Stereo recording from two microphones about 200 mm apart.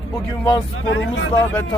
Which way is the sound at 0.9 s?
70° left (ahead or behind).